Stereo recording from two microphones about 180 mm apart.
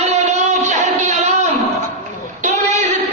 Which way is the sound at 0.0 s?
40° right (ahead or behind).